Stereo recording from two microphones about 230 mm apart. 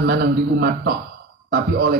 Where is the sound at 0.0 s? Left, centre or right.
Right.